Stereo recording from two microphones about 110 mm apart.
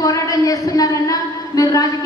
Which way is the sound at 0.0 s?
30° left (ahead or behind).